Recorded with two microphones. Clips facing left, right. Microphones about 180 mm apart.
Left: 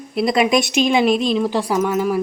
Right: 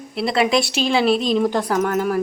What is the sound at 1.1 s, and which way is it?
Speech, 40° right (ahead or behind).